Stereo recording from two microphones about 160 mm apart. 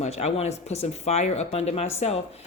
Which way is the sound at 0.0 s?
40° left (ahead or behind).